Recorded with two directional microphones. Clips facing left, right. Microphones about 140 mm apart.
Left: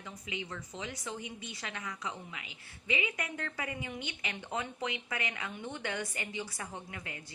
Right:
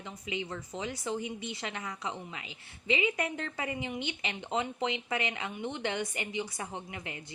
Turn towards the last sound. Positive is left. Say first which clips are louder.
# right 3 dB
turn(degrees=-20)  # may be behind; listen again after turning